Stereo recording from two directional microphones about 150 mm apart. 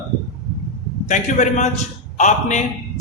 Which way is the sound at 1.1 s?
55° left (ahead or behind).